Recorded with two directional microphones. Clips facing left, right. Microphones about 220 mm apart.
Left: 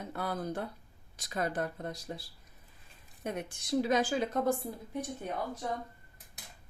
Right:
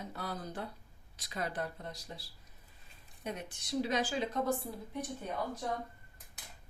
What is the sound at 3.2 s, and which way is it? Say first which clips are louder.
A woman's voice: left 4 dB; 50° left (ahead or behind).